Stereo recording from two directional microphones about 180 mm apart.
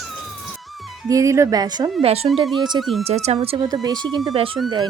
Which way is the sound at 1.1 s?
20° right (ahead or behind).